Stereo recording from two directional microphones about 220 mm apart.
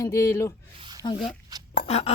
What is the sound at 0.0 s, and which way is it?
Speech, 15° left (ahead or behind).